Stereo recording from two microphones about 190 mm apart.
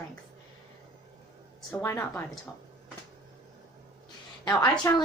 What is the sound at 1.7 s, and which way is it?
Speech, 15° left (ahead or behind).